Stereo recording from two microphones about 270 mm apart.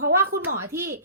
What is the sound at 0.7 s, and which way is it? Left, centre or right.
Speech, centre.